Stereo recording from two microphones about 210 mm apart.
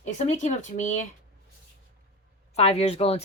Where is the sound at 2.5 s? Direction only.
30° left (ahead or behind).